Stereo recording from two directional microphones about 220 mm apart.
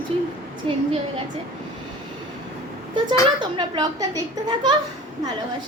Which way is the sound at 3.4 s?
20° right (ahead or behind).